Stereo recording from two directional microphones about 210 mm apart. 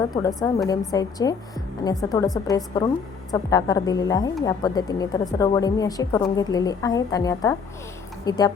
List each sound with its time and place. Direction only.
0.1 s a woman's voice: 15° left (ahead or behind)